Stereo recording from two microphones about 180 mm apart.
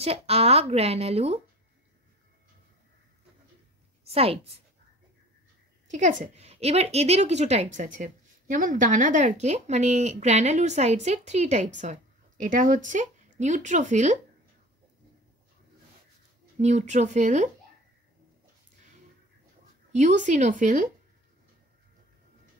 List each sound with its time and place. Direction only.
0.0 s a woman's voice: 35° right (ahead or behind)
4.1 s a woman's voice: 35° right (ahead or behind)
5.9 s a woman's voice: 40° right (ahead or behind)
16.5 s a woman's voice: 40° right (ahead or behind)
19.9 s a woman's voice: 40° right (ahead or behind)